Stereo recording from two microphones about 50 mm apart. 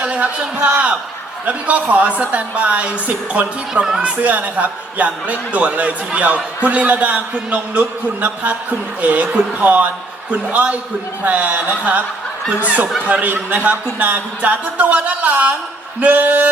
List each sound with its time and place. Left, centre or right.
0.0 s a man's voice: right